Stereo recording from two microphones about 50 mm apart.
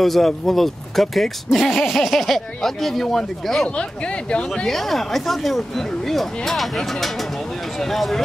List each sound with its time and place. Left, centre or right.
0.0 s speech: centre
3.6 s speech: centre
4.6 s speech: centre